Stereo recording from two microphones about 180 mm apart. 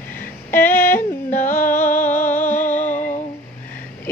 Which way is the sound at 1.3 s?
45° left (ahead or behind).